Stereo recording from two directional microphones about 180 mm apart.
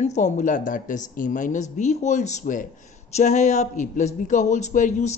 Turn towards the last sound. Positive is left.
turn(degrees=45)  # may be behind; listen again after turning